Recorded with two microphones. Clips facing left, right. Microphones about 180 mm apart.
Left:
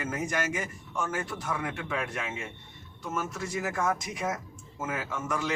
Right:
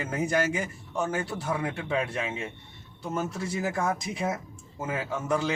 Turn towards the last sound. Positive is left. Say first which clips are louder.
# right 4 dB
turn(degrees=-30)  # may be behind; listen again after turning